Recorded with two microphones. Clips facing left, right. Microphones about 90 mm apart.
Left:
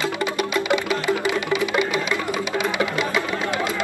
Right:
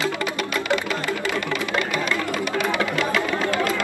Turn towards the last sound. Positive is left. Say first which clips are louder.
# even
turn(degrees=20)  # may be behind; listen again after turning